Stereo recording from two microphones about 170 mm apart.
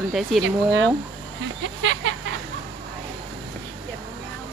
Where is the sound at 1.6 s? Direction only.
90° right.